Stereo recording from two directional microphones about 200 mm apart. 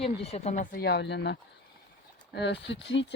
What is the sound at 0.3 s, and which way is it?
Speech, 35° left (ahead or behind).